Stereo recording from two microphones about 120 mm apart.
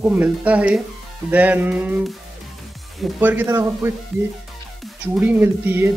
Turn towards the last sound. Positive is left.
turn(degrees=-15)  # may be behind; listen again after turning